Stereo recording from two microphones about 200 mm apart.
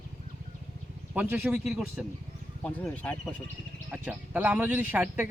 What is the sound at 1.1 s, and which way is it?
Speech, 10° right (ahead or behind).